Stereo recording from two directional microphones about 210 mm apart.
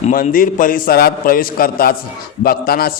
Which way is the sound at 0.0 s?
40° left (ahead or behind).